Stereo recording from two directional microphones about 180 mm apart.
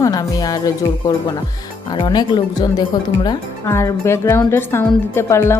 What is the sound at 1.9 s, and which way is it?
A woman's voice, 25° left (ahead or behind).